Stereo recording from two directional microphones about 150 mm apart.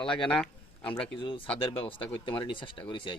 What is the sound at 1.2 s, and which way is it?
Speech, 35° left (ahead or behind).